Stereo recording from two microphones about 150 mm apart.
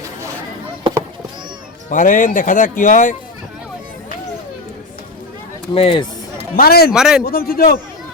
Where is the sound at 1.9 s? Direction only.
65° left (ahead or behind).